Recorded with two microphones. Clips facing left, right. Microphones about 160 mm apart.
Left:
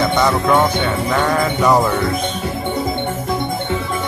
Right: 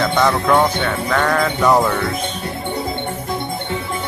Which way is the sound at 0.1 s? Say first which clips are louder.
Even; centre (ahead or behind).